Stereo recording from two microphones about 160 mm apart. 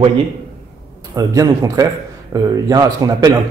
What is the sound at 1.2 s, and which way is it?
A man's voice, 20° right (ahead or behind).